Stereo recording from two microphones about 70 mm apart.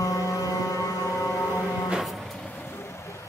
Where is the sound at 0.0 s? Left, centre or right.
Left.